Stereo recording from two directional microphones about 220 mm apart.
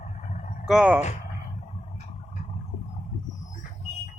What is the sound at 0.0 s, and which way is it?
Vehicle, 35° left (ahead or behind).